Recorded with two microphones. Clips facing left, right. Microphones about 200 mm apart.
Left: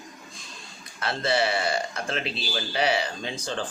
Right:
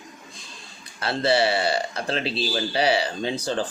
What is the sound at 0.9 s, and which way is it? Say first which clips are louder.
Speech: right 4 dB; 30° right (ahead or behind).